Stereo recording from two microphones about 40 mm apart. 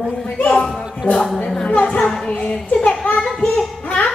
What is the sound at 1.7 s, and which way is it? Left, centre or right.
Speech, left.